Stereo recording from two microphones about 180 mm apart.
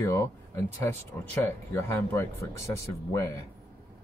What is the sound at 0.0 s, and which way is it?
Speech, 15° left (ahead or behind).